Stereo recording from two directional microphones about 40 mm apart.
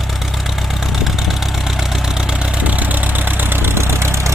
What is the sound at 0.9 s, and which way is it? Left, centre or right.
Vehicle, centre.